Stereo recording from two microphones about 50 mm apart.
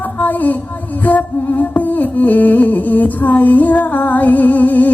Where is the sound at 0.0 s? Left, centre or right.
Left.